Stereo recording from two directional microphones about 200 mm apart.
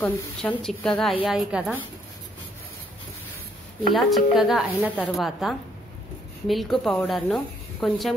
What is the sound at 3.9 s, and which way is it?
A woman's voice, centre (ahead or behind).